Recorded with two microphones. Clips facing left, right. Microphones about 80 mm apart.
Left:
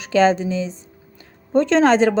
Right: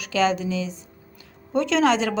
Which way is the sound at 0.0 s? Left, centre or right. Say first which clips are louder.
Left 6 dB; left.